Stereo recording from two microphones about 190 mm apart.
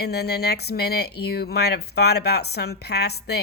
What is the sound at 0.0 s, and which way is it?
Speech, 60° left (ahead or behind).